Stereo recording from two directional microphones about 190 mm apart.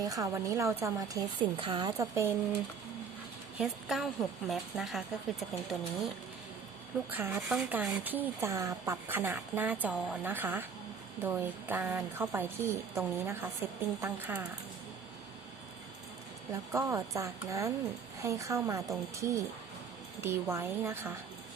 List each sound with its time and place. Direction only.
0.0 s a woman's voice: 20° right (ahead or behind)
3.6 s speech: centre (ahead or behind)
7.1 s a woman's voice: 10° right (ahead or behind)
16.7 s a woman's voice: 15° right (ahead or behind)